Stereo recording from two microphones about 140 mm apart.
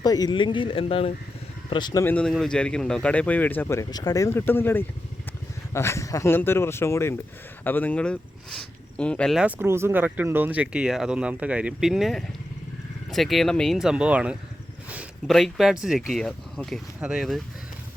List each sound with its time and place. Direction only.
0.0 s speech: 30° left (ahead or behind)
1.7 s speech: 30° left (ahead or behind)
2.0 s a man's voice: 10° left (ahead or behind)
9.4 s speech: 15° right (ahead or behind)